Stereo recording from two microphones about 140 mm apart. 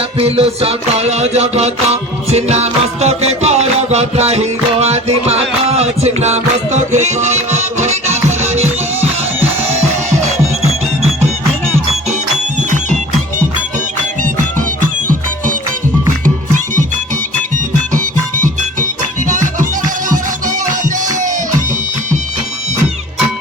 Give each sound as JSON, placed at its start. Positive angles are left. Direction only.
{"t": 0.2, "sound": "music", "side_deg": -45}